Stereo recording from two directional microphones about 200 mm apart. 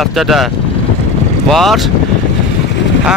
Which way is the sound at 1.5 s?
Centre (ahead or behind).